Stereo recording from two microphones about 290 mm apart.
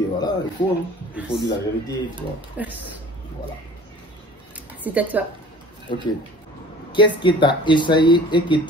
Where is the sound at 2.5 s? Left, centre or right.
Centre.